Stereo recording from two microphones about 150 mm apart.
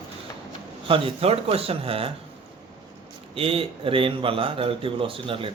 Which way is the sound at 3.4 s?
40° right (ahead or behind).